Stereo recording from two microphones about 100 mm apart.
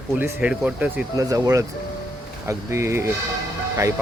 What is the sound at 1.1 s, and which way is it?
Speech, 35° right (ahead or behind).